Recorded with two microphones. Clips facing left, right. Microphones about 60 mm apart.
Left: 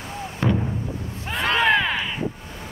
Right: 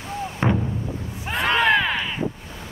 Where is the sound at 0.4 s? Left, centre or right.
Right.